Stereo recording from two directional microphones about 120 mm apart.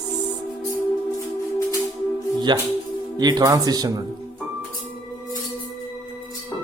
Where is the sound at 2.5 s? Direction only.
35° right (ahead or behind).